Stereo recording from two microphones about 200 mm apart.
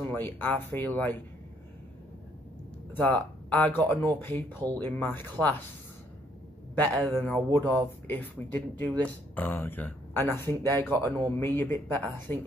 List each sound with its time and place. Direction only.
0.0 s speech: 10° left (ahead or behind)
2.9 s speech: 10° left (ahead or behind)
6.8 s speech: 10° left (ahead or behind)